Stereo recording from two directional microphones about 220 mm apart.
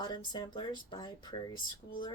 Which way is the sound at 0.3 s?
20° left (ahead or behind).